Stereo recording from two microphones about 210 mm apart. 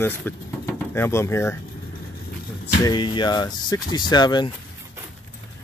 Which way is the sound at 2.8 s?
20° left (ahead or behind).